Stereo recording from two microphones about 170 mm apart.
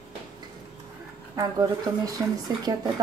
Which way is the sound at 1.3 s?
20° right (ahead or behind).